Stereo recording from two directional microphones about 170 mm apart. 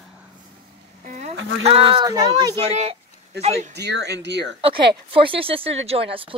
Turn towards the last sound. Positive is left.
turn(degrees=-30)  # may be behind; listen again after turning